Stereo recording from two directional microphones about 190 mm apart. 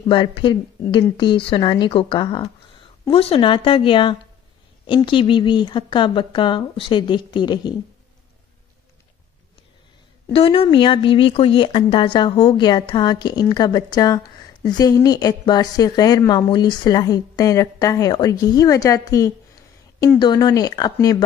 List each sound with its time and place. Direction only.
0.1 s speech: 25° left (ahead or behind)
10.3 s speech: 30° left (ahead or behind)